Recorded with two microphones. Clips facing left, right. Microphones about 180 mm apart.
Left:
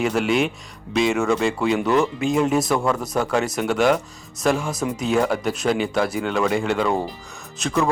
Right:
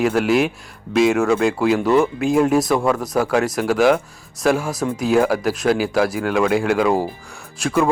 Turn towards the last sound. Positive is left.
turn(degrees=-10)  # may be behind; listen again after turning